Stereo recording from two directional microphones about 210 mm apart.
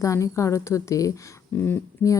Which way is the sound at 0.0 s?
15° left (ahead or behind).